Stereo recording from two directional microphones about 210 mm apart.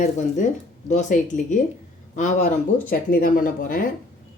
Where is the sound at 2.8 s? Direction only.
45° left (ahead or behind).